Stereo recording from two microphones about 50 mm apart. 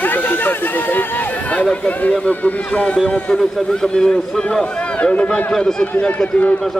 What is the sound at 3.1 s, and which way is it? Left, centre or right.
A man's voice, centre.